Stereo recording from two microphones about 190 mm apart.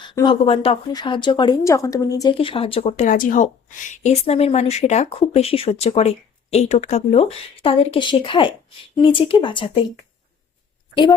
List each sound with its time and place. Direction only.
0.0 s speech: 25° left (ahead or behind)